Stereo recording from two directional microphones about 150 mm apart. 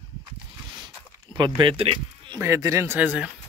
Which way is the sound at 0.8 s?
30° right (ahead or behind).